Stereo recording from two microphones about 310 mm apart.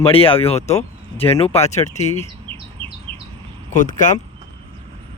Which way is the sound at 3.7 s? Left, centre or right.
Left.